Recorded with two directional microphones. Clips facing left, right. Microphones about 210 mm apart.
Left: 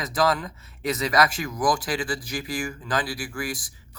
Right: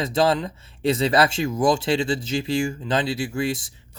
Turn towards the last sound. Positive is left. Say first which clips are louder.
# right 7 dB
turn(degrees=-25)  # may be behind; listen again after turning